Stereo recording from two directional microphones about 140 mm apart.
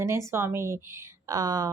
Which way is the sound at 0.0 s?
20° right (ahead or behind).